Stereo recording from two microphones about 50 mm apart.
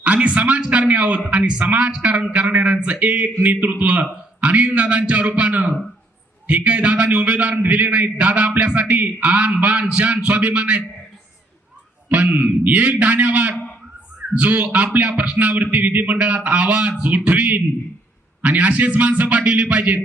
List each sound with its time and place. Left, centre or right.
0.0 s a man's voice: right
12.1 s a man's voice: right